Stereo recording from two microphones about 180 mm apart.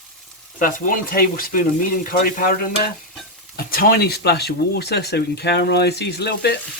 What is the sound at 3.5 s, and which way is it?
Speech, 55° left (ahead or behind).